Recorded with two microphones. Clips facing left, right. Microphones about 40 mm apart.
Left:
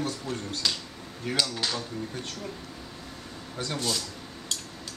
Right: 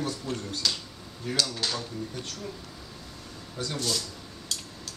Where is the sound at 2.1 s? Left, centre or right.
Left.